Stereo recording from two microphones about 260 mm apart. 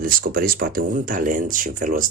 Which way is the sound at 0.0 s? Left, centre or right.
Right.